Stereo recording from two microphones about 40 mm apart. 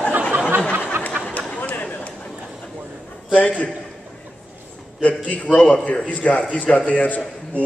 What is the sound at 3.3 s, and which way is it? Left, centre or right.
Speech, left.